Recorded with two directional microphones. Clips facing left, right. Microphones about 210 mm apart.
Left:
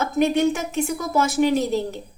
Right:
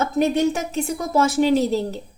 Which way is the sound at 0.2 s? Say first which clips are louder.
Left 1 dB; 35° right (ahead or behind).